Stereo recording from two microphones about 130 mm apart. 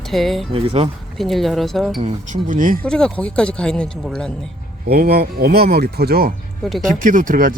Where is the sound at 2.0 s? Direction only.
80° right.